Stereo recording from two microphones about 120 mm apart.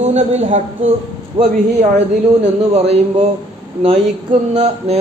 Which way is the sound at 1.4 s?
45° right (ahead or behind).